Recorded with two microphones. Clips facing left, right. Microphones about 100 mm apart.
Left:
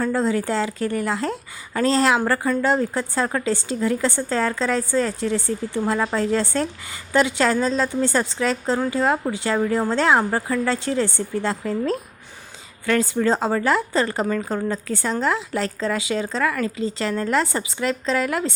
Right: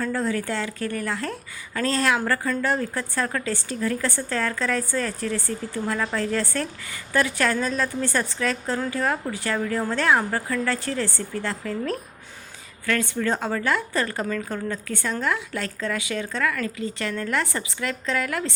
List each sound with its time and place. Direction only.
0.0 s a woman's voice: 30° left (ahead or behind)